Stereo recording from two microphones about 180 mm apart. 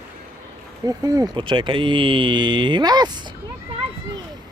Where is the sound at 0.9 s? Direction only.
20° right (ahead or behind).